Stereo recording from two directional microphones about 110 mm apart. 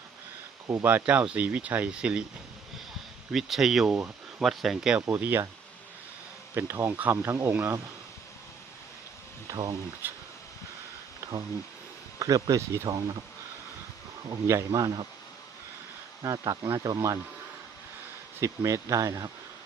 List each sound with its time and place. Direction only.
0.7 s speech: 20° right (ahead or behind)
3.3 s speech: centre (ahead or behind)
5.0 s speech: 20° right (ahead or behind)
6.5 s speech: 20° right (ahead or behind)
9.5 s speech: 30° right (ahead or behind)
10.0 s speech: 20° right (ahead or behind)
11.2 s a sound: 30° right (ahead or behind)
12.2 s speech: 30° right (ahead or behind)
14.3 s speech: 30° right (ahead or behind)
16.2 s speech: 35° right (ahead or behind)
18.3 s speech: 25° right (ahead or behind)